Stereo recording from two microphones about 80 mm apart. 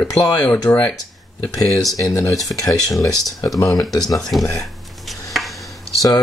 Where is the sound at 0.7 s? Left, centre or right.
Left.